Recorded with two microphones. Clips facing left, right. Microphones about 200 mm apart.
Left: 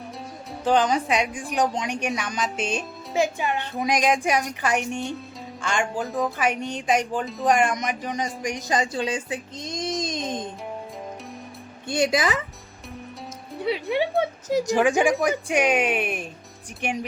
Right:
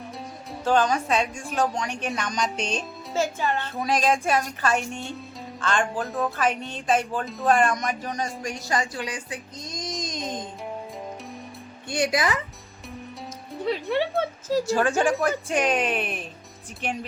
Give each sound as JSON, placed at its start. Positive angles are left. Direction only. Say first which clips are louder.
{"t": 0.6, "sound": "speech", "louder": "left 1 dB", "side_deg": 15}
{"t": 11.9, "sound": "speech", "louder": "left 2 dB", "side_deg": 20}
{"t": 13.5, "sound": "speech", "louder": "left 1 dB", "side_deg": 5}